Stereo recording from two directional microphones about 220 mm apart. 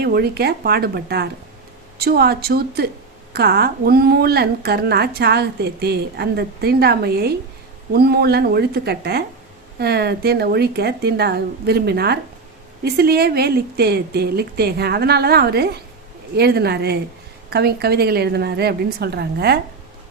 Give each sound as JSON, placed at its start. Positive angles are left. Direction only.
{"t": 0.0, "sound": "a woman's voice", "side_deg": -45}